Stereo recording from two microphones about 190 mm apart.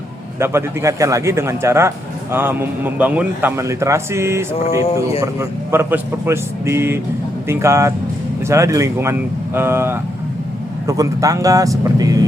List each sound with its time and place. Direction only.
0.3 s a man's voice: 15° right (ahead or behind)